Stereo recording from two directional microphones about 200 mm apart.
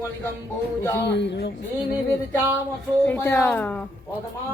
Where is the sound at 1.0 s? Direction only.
60° left (ahead or behind).